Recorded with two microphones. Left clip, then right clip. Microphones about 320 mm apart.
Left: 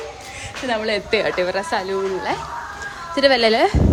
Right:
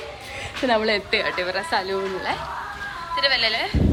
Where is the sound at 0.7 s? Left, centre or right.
Centre.